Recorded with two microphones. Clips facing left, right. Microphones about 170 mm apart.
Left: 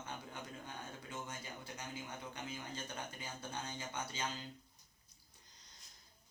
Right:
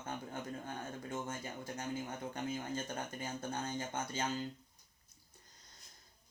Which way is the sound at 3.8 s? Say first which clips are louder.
Right 4 dB; 50° right (ahead or behind).